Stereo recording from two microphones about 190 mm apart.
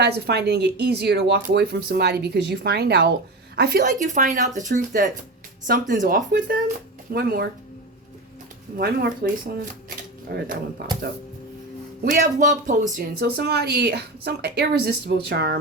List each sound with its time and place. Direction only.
0.0 s a woman's voice: 60° right (ahead or behind)
3.8 s speech: 40° right (ahead or behind)
9.2 s speech: 55° right (ahead or behind)
10.3 s speech: 45° right (ahead or behind)
12.1 s speech: 40° right (ahead or behind)
13.0 s speech: 55° right (ahead or behind)